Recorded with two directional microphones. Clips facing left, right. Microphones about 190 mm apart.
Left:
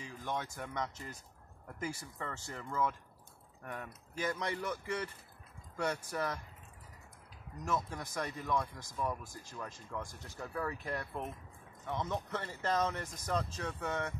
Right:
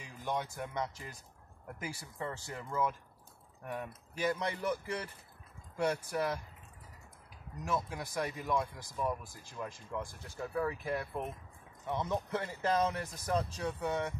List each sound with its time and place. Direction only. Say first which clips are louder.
0.0 s speech: right 2 dB; 10° right (ahead or behind)
5.8 s speech: right 3 dB; 10° right (ahead or behind)
7.6 s speech: right 1 dB; 10° right (ahead or behind)